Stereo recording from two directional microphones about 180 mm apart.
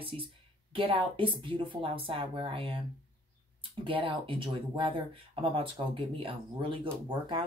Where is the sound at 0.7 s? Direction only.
30° right (ahead or behind).